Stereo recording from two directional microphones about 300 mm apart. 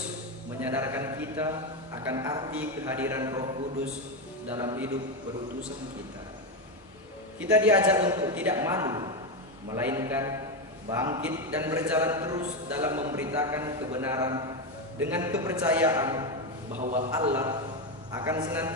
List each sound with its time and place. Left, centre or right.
0.6 s a man's voice: centre
7.3 s a man's voice: centre
16.7 s a man's voice: right
17.1 s a man's voice: centre